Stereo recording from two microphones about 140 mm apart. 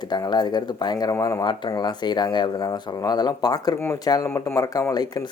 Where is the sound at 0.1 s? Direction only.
30° left (ahead or behind).